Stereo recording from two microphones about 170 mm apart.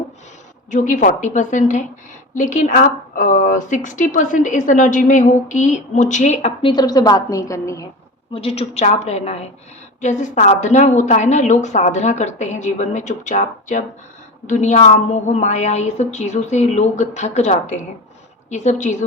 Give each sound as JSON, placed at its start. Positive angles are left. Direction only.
{"t": 0.7, "sound": "a woman's voice", "side_deg": 45}
{"t": 6.7, "sound": "a woman's voice", "side_deg": 20}
{"t": 8.3, "sound": "a woman's voice", "side_deg": 35}